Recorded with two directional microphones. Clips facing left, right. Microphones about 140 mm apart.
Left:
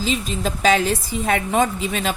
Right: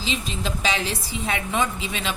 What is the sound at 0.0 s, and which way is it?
A woman's voice, 45° left (ahead or behind).